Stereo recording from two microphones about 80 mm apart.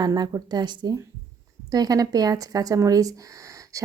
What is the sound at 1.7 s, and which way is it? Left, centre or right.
A woman's voice, right.